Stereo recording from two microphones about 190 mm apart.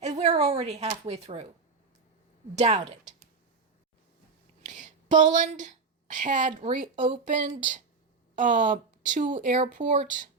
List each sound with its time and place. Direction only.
0.0 s a sound: 35° right (ahead or behind)
1.0 s speech: 35° right (ahead or behind)
2.6 s speech: 35° right (ahead or behind)
4.6 s a woman's voice: 40° right (ahead or behind)